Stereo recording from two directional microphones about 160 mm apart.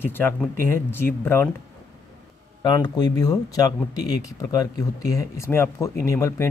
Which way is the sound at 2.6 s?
25° left (ahead or behind).